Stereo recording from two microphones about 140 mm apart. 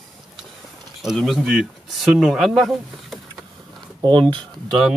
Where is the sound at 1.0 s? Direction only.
Centre (ahead or behind).